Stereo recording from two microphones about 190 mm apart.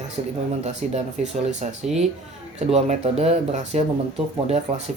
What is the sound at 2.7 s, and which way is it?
Speech, 35° right (ahead or behind).